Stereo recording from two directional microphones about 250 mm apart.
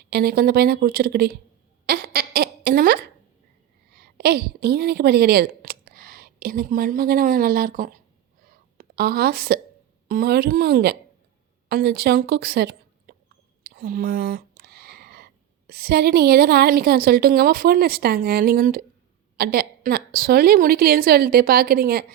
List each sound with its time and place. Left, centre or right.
0.1 s a woman's voice: right
1.9 s a sound: right
3.9 s a woman's voice: right